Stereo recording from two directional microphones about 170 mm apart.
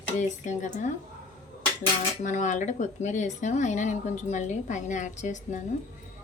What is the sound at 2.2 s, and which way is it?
Speech, 45° left (ahead or behind).